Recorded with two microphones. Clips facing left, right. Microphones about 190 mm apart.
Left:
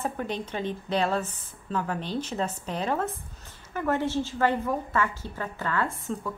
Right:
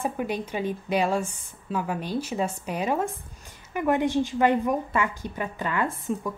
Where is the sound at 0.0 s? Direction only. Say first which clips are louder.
Right 3 dB; 10° right (ahead or behind).